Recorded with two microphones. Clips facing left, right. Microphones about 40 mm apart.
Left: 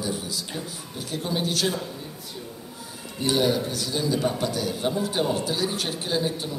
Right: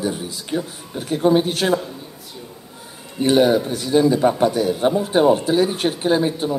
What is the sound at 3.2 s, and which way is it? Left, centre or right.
A man's voice, right.